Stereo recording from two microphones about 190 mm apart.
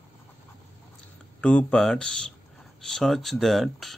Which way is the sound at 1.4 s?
5° left (ahead or behind).